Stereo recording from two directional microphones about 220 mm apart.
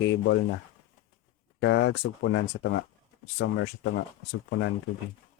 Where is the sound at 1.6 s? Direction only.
55° left (ahead or behind).